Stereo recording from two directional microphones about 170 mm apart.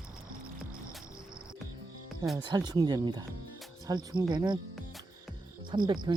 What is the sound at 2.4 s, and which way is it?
Speech, 25° right (ahead or behind).